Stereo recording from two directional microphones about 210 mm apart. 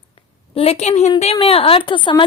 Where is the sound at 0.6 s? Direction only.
30° left (ahead or behind).